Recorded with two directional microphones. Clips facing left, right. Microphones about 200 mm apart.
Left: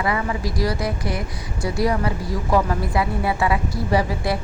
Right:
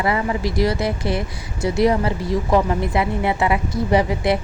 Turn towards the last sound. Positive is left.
turn(degrees=-20)  # may be behind; listen again after turning